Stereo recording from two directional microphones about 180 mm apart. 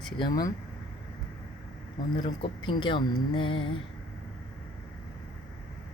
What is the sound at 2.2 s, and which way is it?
Speech, 25° left (ahead or behind).